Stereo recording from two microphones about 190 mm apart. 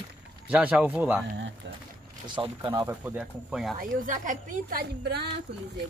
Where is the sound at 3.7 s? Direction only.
45° right (ahead or behind).